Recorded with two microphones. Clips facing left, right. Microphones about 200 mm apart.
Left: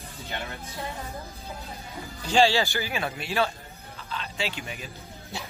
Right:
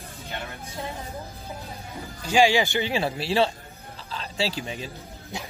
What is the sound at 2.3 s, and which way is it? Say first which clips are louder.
A man's voice: right 2 dB; 15° right (ahead or behind).